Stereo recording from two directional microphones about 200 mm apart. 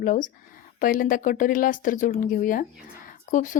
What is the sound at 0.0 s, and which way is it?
A woman's voice, 40° left (ahead or behind).